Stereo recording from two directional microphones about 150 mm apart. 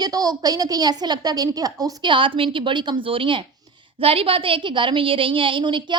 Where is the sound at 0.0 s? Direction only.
25° right (ahead or behind).